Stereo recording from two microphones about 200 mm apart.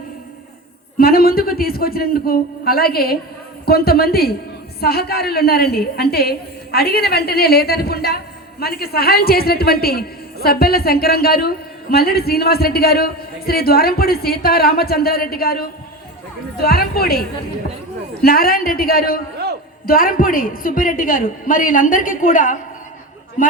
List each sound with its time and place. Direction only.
0.9 s a woman's voice: 45° left (ahead or behind)